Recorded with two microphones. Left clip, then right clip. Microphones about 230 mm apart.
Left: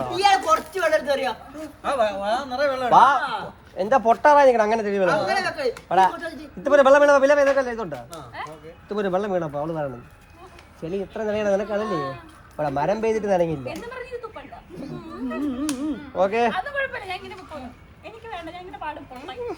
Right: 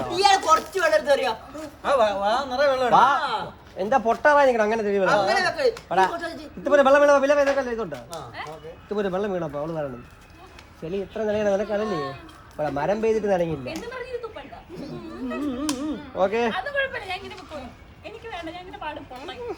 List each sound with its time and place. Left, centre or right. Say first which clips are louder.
0.2 s a man's voice: even; centre
2.9 s speech: left 4 dB; left
3.2 s speech: even; centre
3.8 s speech: left 3 dB; left
5.0 s a woman's voice: right 3 dB; centre
6.6 s speech: left 2 dB; left
8.4 s a woman's voice: left 3 dB; centre
8.9 s speech: left 2 dB; left
11.9 s a woman's voice: left 2 dB; centre
12.5 s speech: left 1 dB; left
13.9 s a woman's voice: right 1 dB; centre
16.1 s speech: left 2 dB; left
16.5 s a woman's voice: even; centre